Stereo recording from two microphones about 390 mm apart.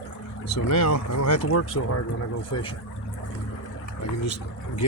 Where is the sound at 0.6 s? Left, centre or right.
Left.